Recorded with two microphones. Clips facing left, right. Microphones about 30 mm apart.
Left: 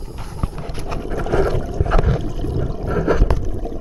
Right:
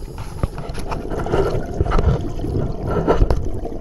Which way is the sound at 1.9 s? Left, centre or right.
Centre.